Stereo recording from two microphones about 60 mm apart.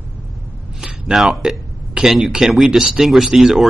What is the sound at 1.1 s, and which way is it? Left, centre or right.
Speech, centre.